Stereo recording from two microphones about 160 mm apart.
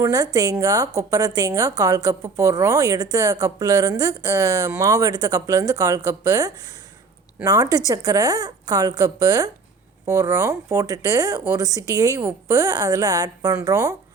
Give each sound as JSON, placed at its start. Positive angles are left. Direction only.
{"t": 0.0, "sound": "a woman's voice", "side_deg": -20}